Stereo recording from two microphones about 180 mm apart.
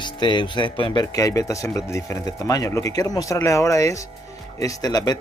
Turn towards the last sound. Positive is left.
turn(degrees=20)  # may be behind; listen again after turning